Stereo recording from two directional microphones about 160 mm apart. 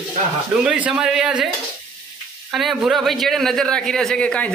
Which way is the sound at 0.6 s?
5° right (ahead or behind).